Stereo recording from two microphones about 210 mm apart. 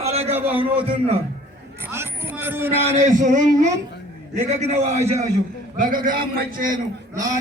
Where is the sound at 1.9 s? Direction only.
10° right (ahead or behind).